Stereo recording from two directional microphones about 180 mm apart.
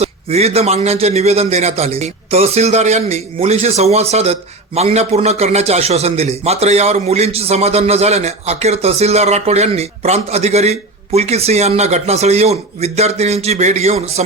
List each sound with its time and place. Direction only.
0.0 s a man's voice: 35° right (ahead or behind)